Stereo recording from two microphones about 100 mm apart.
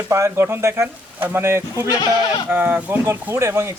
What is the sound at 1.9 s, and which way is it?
Speech, 45° left (ahead or behind).